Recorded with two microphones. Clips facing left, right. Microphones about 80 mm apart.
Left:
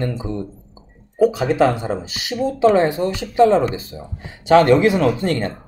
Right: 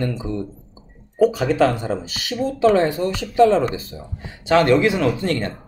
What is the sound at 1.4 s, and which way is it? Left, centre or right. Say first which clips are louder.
Speech: left 1 dB; left.